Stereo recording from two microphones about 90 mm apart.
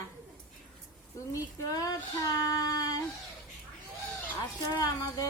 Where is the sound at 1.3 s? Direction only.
45° left (ahead or behind).